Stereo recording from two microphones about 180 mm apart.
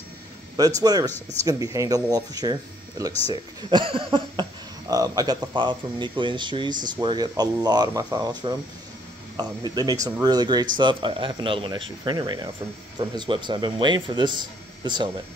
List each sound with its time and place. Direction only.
0.6 s speech: 20° right (ahead or behind)